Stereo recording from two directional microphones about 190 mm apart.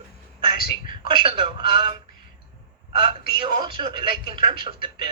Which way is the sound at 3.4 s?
25° right (ahead or behind).